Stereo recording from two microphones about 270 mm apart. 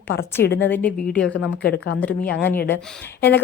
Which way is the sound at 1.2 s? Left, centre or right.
Left.